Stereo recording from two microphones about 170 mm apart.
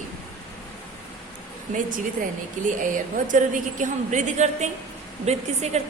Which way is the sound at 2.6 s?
50° right (ahead or behind).